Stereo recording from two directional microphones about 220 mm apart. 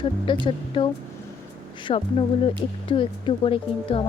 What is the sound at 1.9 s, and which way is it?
Speech, 25° left (ahead or behind).